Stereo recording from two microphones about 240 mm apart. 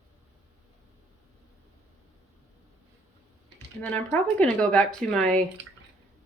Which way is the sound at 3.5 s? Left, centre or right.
Centre.